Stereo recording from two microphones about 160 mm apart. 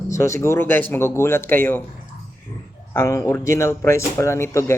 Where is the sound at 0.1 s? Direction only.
20° left (ahead or behind).